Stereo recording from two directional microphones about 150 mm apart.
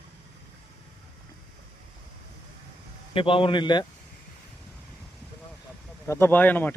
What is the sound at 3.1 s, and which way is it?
Speech, 35° left (ahead or behind).